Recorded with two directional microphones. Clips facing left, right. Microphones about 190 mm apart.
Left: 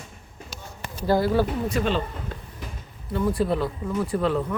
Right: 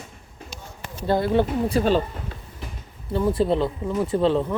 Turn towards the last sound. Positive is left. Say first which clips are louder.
# right 3 dB
turn(degrees=-30)  # may be behind; listen again after turning